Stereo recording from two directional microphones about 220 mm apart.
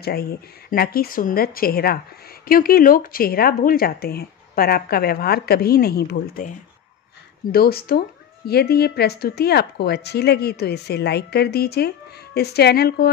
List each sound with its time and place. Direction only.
0.0 s speech: 45° left (ahead or behind)
7.5 s speech: 45° left (ahead or behind)